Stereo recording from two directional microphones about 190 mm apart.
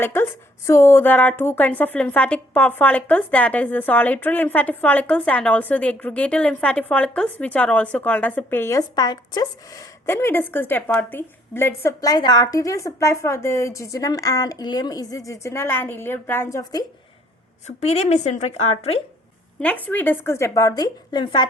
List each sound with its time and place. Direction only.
0.0 s a woman's voice: 10° left (ahead or behind)
17.7 s a woman's voice: 35° left (ahead or behind)
19.5 s a woman's voice: 10° left (ahead or behind); by 21.4 s 25° left (ahead or behind)